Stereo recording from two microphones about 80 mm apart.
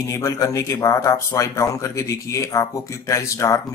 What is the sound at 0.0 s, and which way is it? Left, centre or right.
Speech, left.